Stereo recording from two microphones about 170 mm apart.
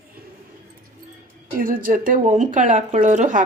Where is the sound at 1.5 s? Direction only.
55° right (ahead or behind).